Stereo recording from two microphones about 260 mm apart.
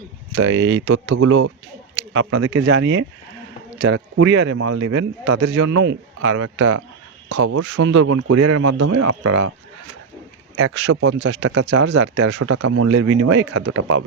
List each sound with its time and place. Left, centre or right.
0.3 s speech: right
4.7 s a man's voice: right
5.8 s speech: right
8.4 s a man's voice: right
10.6 s speech: right
11.3 s speech: right
12.4 s speech: right